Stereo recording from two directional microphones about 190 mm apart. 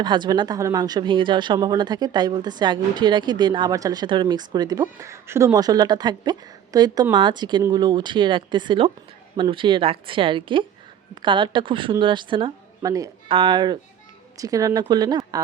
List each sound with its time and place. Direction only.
0.0 s speech: 25° right (ahead or behind)